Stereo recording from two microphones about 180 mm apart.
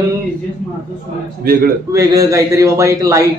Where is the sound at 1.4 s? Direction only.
55° right (ahead or behind).